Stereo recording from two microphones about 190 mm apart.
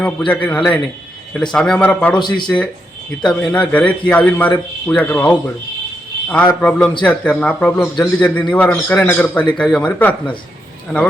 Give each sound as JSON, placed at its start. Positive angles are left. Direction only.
{"t": 0.0, "sound": "a man's voice", "side_deg": 5}
{"t": 2.1, "sound": "speech", "side_deg": 25}
{"t": 3.2, "sound": "a man's voice", "side_deg": 5}